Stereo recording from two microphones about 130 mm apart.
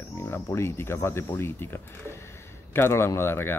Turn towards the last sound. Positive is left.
turn(degrees=15)  # may be behind; listen again after turning